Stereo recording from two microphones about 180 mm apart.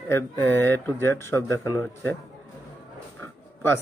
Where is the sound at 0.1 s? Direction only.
10° left (ahead or behind).